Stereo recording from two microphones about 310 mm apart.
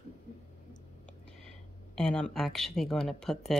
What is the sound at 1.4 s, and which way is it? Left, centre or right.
Speech, centre.